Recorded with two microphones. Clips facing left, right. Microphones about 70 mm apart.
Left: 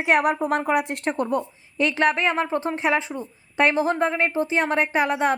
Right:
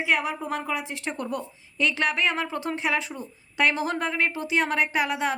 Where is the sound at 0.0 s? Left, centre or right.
Left.